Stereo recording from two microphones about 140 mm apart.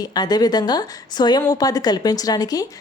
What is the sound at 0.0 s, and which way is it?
A woman's voice, 30° left (ahead or behind).